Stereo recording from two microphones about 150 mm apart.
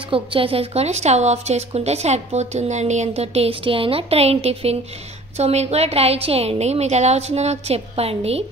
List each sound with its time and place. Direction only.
0.1 s a woman's voice: 35° right (ahead or behind)